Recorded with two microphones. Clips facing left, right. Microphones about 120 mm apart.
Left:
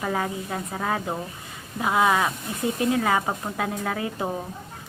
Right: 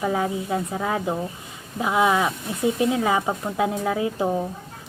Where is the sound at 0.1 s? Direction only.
20° right (ahead or behind).